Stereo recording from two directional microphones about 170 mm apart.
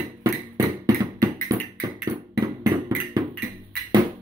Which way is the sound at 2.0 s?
25° right (ahead or behind).